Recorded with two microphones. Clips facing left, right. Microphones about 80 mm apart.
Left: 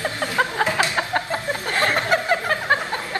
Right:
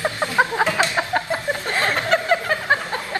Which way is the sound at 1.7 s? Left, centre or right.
Right.